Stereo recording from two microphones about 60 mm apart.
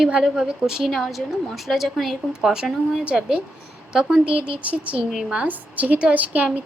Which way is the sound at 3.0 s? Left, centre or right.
Centre.